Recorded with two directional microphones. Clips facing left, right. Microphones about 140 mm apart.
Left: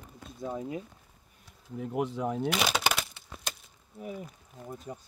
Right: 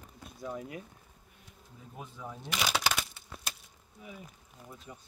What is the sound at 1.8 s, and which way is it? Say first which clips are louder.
Speech: left 14 dB; 80° left.